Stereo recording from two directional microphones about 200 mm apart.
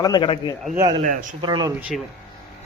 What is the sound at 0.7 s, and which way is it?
Speech, 20° right (ahead or behind).